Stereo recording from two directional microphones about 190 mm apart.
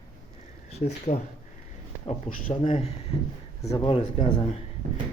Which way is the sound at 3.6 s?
25° left (ahead or behind).